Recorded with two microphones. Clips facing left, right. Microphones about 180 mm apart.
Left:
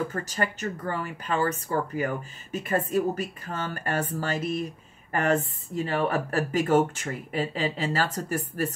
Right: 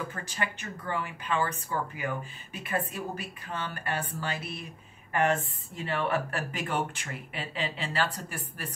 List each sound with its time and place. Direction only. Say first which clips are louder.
0.1 s speech: left 6 dB; 40° left (ahead or behind)